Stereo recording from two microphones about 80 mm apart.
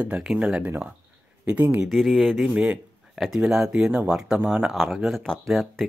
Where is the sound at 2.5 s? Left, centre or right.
Centre.